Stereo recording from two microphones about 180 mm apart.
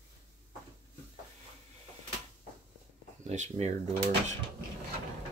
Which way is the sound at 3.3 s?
40° right (ahead or behind).